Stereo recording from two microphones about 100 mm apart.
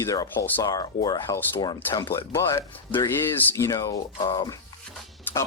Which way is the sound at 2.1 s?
25° left (ahead or behind).